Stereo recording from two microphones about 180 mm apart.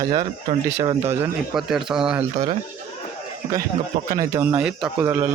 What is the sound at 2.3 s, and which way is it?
Speech, 20° right (ahead or behind).